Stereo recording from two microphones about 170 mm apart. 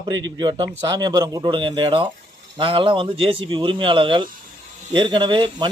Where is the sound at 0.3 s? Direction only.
25° right (ahead or behind).